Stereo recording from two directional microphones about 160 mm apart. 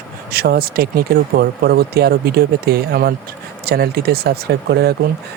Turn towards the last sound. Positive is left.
turn(degrees=-90)